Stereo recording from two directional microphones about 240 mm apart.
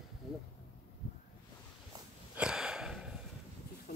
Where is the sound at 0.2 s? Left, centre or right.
Centre.